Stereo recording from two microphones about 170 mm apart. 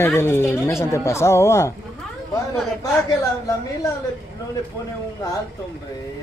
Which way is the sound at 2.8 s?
20° left (ahead or behind).